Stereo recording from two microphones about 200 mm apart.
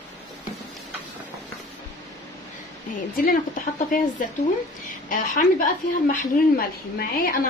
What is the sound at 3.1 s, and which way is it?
Speech, 45° left (ahead or behind).